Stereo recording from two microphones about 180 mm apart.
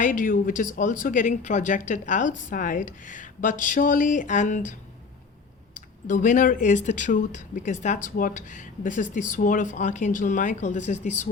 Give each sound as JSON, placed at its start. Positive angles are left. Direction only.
{"t": 0.0, "sound": "speech", "side_deg": 50}
{"t": 6.1, "sound": "speech", "side_deg": 45}